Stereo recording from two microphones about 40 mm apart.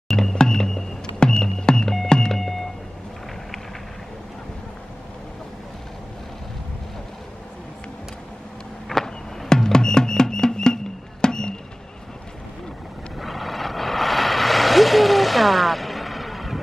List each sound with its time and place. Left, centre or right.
0.3 s music: centre
8.8 s a sound: centre
9.5 s music: centre
13.2 s vehicle: centre